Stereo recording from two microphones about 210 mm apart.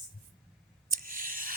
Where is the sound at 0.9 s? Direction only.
40° right (ahead or behind).